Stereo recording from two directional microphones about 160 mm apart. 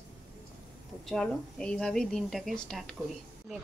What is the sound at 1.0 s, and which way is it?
Speech, 5° left (ahead or behind).